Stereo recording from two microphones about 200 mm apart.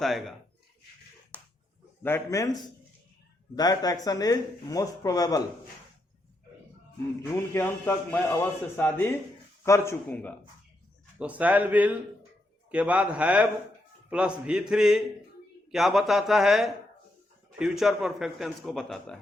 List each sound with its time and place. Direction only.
0.0 s a man's voice: centre (ahead or behind)
1.3 s finger snapping: 5° left (ahead or behind)
2.0 s a man's voice: 15° left (ahead or behind)
7.3 s a man's voice: 15° left (ahead or behind)
11.2 s a man's voice: 5° right (ahead or behind)